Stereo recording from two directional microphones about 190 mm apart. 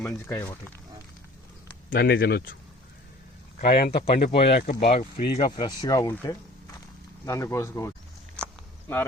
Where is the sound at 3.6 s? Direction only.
50° left (ahead or behind).